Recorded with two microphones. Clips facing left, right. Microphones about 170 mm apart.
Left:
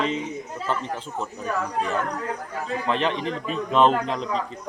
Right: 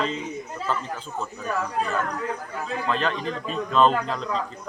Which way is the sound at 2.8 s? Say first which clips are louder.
Left 2 dB; 20° left (ahead or behind).